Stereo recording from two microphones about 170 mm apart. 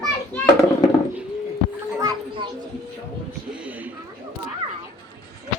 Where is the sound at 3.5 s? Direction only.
10° right (ahead or behind).